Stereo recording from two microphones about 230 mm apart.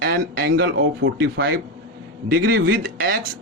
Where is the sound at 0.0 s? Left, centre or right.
Right.